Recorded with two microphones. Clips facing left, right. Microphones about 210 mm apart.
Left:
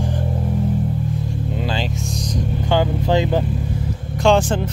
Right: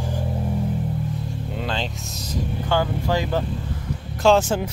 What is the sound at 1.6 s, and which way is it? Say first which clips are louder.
Vehicle: left 2 dB; 5° left (ahead or behind).